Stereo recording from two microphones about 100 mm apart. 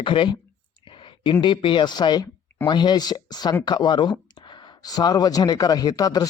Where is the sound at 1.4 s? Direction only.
55° left (ahead or behind).